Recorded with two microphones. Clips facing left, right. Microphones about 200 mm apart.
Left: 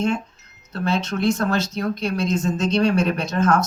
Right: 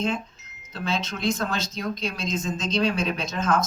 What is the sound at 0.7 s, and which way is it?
Speech, 65° left (ahead or behind).